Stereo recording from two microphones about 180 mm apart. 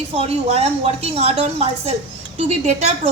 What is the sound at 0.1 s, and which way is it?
A woman's voice, 35° right (ahead or behind).